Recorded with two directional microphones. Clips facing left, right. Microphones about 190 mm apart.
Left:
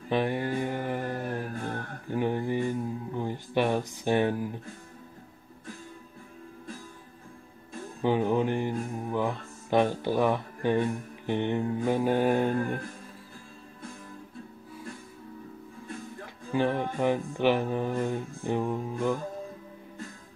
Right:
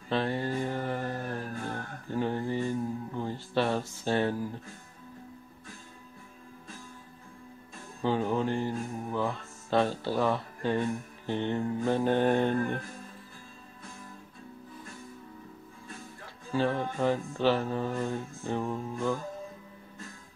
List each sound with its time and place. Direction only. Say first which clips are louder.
0.1 s mantra: left 2 dB; 15° left (ahead or behind)
2.0 s a sound: left 2 dB; 15° left (ahead or behind)
8.0 s mantra: left 3 dB; 15° left (ahead or behind)
16.5 s music: left 2 dB; 15° left (ahead or behind)